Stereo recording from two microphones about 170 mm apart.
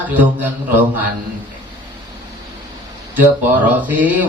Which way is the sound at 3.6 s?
10° right (ahead or behind).